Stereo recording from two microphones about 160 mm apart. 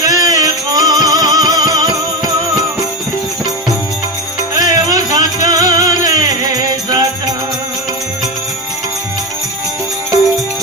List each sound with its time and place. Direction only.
0.0 s music: 20° right (ahead or behind)
4.5 s music: 25° right (ahead or behind)